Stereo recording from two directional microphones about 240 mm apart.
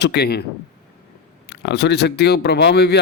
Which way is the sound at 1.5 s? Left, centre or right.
Left.